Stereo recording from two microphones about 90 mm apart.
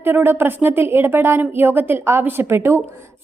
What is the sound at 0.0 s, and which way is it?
A woman's voice, 25° right (ahead or behind).